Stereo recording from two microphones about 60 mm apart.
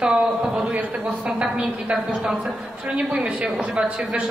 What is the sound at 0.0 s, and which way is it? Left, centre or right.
A woman's voice, centre.